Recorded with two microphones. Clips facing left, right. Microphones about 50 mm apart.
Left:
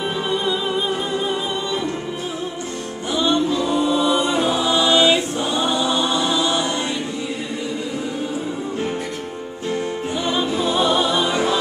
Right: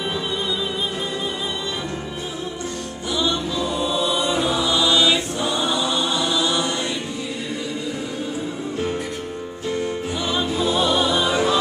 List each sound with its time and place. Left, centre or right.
3.2 s music: left
3.6 s choir: left
10.2 s music: centre